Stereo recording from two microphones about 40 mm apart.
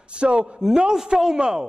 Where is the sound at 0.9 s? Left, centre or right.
Centre.